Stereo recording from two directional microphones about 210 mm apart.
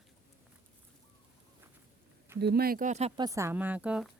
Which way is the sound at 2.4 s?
50° right (ahead or behind).